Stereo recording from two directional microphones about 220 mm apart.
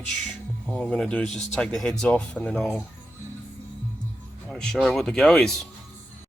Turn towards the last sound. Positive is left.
turn(degrees=5)  # may be behind; listen again after turning